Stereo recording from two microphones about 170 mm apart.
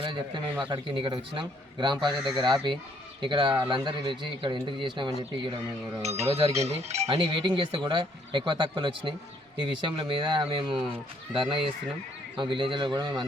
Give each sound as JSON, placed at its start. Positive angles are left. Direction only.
{"t": 0.0, "sound": "speech", "side_deg": -25}
{"t": 6.0, "sound": "speech", "side_deg": -40}